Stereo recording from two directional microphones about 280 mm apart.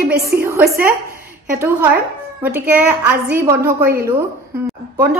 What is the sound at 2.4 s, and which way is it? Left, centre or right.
A woman's voice, centre.